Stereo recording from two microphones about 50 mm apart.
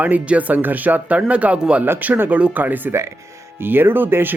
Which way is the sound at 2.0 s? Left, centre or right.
Right.